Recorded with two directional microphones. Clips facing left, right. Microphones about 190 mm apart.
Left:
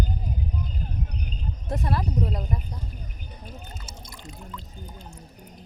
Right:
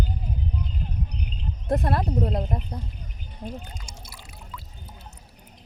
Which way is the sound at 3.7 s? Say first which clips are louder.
Left 1 dB; 15° right (ahead or behind).